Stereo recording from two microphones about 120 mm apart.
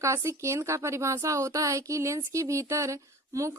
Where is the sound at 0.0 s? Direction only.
25° right (ahead or behind).